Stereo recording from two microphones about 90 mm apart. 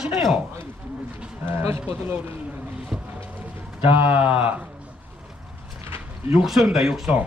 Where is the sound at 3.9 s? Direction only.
20° right (ahead or behind).